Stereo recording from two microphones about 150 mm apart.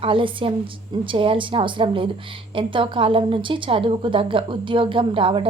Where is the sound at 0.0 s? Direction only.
35° right (ahead or behind).